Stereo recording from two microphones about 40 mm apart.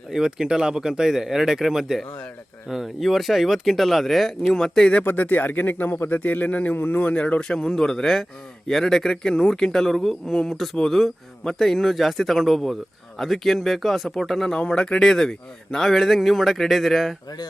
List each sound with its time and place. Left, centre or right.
0.1 s speech: centre
5.0 s a man's voice: left
6.7 s a man's voice: left
7.0 s speech: left
7.3 s a man's voice: centre
14.7 s speech: left; by 17.2 s centre